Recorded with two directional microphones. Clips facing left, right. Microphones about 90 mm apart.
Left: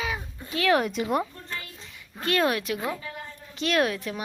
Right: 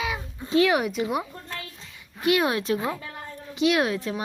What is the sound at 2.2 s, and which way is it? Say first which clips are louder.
Speech: right 2 dB; 10° right (ahead or behind).